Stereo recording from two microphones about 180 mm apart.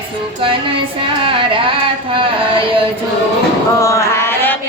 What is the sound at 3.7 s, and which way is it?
Mantra, 15° left (ahead or behind).